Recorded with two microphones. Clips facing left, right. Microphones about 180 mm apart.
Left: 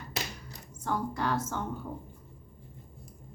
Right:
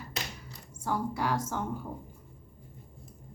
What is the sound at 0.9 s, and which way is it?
Speech, 10° right (ahead or behind).